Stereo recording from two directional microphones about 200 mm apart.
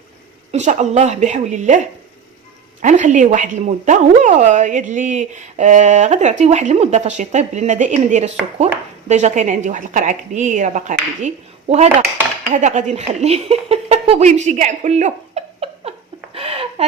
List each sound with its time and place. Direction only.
0.5 s a woman's voice: 35° right (ahead or behind)
2.8 s a woman's voice: 40° right (ahead or behind)
12.5 s a sound: 35° right (ahead or behind)